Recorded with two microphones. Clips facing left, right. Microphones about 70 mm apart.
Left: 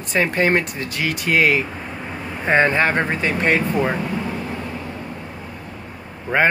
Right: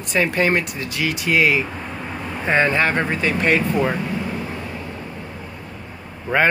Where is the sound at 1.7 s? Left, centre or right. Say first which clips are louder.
Right 1 dB; centre.